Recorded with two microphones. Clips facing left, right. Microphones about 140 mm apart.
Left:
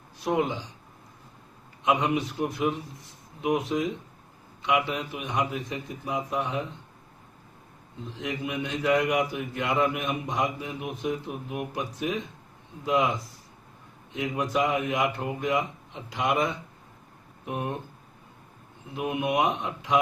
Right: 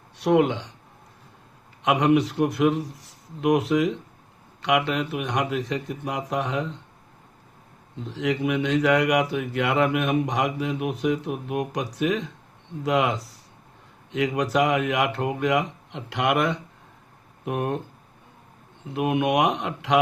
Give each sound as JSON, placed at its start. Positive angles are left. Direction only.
{"t": 0.2, "sound": "speech", "side_deg": -70}
{"t": 1.8, "sound": "speech", "side_deg": -70}
{"t": 8.0, "sound": "speech", "side_deg": -75}
{"t": 18.9, "sound": "speech", "side_deg": -70}